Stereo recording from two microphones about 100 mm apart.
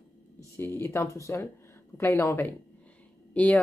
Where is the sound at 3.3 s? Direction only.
15° left (ahead or behind).